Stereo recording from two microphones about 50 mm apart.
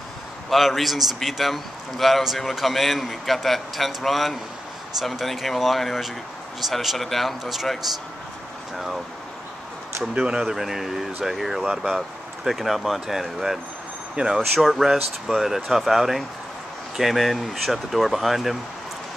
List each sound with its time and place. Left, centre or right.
0.5 s a man's voice: centre
10.1 s speech: right
10.4 s a man's voice: centre
14.5 s a man's voice: centre